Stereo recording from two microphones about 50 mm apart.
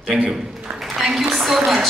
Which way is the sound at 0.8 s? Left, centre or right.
Centre.